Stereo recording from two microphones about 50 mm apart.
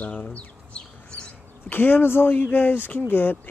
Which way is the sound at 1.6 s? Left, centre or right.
Left.